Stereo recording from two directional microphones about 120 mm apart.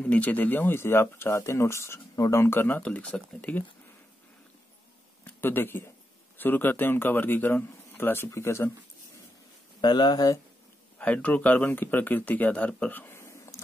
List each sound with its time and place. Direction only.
0.0 s speech: 15° left (ahead or behind)
5.2 s speech: 15° left (ahead or behind)
9.8 s speech: 40° left (ahead or behind)
11.0 s speech: 10° left (ahead or behind)